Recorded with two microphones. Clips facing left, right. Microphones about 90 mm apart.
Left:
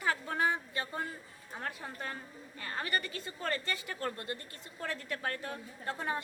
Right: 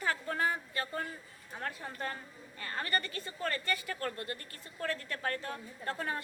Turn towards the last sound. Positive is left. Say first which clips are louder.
# even
turn(degrees=15)  # may be behind; listen again after turning